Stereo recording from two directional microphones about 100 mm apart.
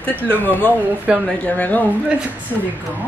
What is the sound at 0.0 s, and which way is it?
Speech, 15° left (ahead or behind).